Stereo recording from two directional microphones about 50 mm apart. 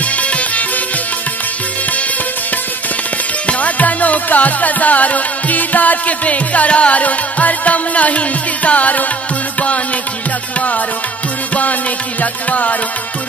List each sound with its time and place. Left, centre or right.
0.0 s music: left
3.4 s music: left
12.2 s music: left